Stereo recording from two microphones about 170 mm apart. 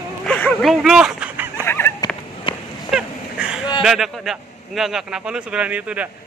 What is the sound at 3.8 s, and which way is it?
A man's voice, centre (ahead or behind).